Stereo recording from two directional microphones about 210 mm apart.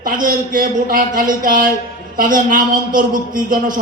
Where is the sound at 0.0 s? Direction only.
40° right (ahead or behind).